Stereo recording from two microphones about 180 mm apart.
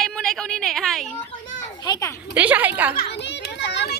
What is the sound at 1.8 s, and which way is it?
Speech, 20° left (ahead or behind).